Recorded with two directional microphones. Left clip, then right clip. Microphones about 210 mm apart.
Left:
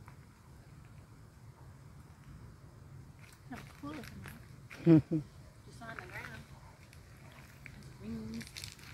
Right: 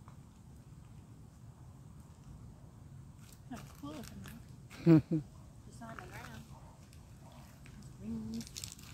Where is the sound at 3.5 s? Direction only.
35° right (ahead or behind).